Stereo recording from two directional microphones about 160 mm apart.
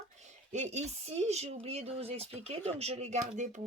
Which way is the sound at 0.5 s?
45° right (ahead or behind).